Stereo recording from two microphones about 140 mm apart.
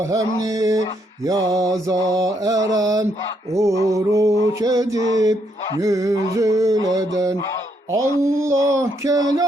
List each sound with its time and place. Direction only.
0.4 s mantra: 25° right (ahead or behind)